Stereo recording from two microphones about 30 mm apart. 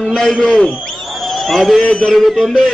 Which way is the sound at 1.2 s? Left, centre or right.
Centre.